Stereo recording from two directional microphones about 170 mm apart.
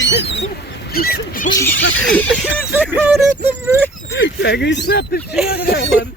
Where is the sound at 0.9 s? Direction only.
65° left (ahead or behind).